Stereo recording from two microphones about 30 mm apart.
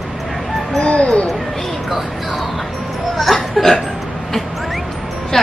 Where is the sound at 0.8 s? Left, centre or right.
Left.